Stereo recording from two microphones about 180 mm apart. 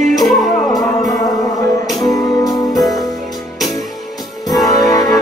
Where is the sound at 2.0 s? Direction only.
20° left (ahead or behind).